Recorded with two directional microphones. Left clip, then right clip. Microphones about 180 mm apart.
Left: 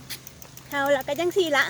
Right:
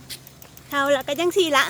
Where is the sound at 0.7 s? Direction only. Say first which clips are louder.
Right 2 dB; 35° right (ahead or behind).